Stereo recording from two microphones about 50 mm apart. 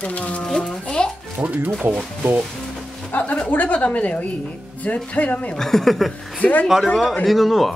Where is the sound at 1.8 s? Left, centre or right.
Right.